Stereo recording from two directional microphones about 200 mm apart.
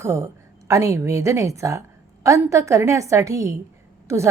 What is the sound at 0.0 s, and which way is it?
A woman's voice, 15° right (ahead or behind).